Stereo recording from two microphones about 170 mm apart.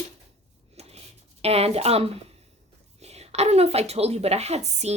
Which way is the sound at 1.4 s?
35° right (ahead or behind).